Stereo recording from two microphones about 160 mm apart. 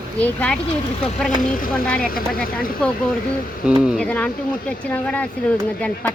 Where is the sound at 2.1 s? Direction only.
65° left (ahead or behind).